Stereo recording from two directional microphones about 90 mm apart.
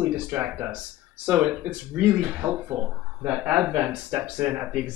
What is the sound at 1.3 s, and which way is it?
Speech, 10° right (ahead or behind).